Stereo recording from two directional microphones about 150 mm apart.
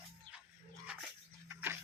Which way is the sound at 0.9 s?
10° right (ahead or behind).